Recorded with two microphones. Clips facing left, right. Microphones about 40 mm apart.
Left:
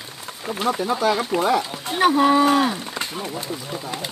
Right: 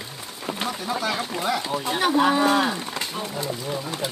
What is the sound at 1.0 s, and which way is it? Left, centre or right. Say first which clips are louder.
Speech: left 5 dB; centre.